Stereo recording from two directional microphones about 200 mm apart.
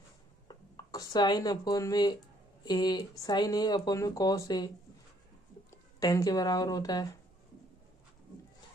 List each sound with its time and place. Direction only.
0.4 s a sound: 20° left (ahead or behind)
2.6 s speech: 20° left (ahead or behind)
5.7 s speech: 15° left (ahead or behind)